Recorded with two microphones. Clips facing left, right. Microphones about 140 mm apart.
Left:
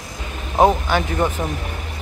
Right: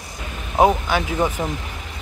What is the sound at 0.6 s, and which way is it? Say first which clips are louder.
Speech: left 1 dB; 5° right (ahead or behind).